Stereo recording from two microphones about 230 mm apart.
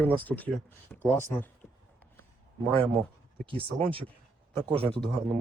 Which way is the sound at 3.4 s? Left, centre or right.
Right.